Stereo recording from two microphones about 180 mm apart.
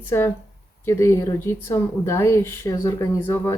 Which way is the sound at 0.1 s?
15° left (ahead or behind).